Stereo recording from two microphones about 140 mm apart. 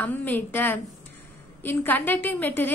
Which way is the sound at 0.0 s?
15° left (ahead or behind).